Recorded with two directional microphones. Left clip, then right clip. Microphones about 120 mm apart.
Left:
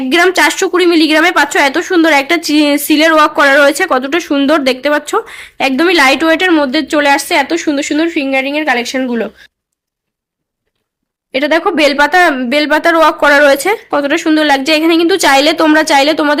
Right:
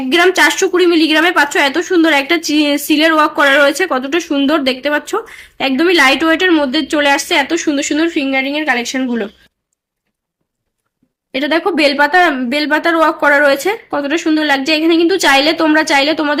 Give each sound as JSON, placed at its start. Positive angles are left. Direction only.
{"t": 0.1, "sound": "a woman's voice", "side_deg": 35}
{"t": 11.3, "sound": "a woman's voice", "side_deg": 30}